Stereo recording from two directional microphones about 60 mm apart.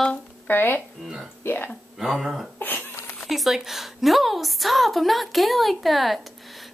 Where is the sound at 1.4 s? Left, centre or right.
Left.